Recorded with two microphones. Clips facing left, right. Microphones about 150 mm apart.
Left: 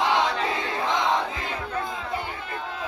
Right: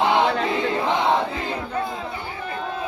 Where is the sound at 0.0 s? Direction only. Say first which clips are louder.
Right 4 dB; 35° right (ahead or behind).